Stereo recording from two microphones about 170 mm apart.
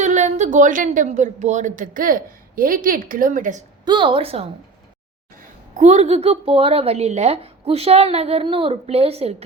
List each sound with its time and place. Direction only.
0.0 s a woman's voice: 45° right (ahead or behind)
3.8 s a woman's voice: 30° right (ahead or behind)
5.4 s a woman's voice: 45° right (ahead or behind)